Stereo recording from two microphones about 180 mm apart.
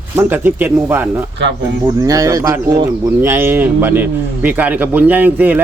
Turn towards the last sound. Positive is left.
turn(degrees=-10)  # may be behind; listen again after turning